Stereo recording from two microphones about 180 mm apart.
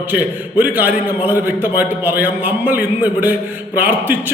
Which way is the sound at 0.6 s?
10° right (ahead or behind).